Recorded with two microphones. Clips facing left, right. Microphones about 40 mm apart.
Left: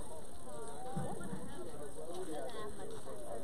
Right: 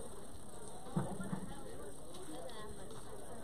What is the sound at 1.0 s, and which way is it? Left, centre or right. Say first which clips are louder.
Music: right 3 dB; right.